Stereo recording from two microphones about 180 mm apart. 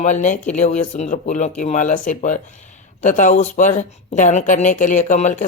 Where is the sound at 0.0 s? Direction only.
40° left (ahead or behind).